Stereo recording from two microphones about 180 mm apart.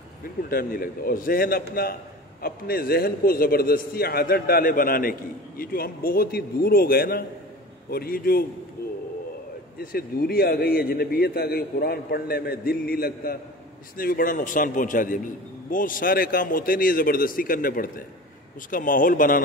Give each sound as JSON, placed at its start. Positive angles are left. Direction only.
{"t": 0.4, "sound": "a man's voice", "side_deg": 55}
{"t": 9.8, "sound": "a man's voice", "side_deg": 60}